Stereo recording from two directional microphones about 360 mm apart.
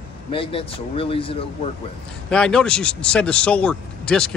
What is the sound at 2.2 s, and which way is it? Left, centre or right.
Speech, centre.